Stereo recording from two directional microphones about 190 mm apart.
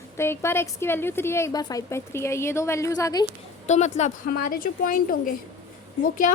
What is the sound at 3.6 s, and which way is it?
A woman's voice, 40° left (ahead or behind).